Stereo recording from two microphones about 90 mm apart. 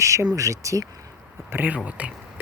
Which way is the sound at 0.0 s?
35° right (ahead or behind).